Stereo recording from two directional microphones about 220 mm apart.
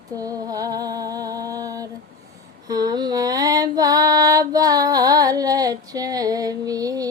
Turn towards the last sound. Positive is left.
turn(degrees=-15)  # may be behind; listen again after turning